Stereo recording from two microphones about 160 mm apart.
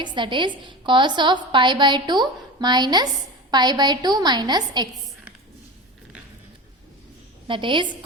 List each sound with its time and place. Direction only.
0.0 s a woman's voice: 30° right (ahead or behind)
7.4 s a woman's voice: 30° right (ahead or behind)